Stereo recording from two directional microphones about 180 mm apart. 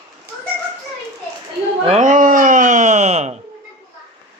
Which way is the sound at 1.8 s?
40° right (ahead or behind).